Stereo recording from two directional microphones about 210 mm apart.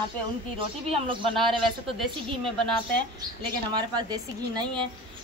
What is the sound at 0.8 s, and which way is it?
Speech, 25° right (ahead or behind).